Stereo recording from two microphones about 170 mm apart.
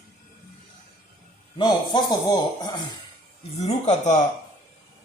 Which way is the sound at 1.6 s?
25° left (ahead or behind).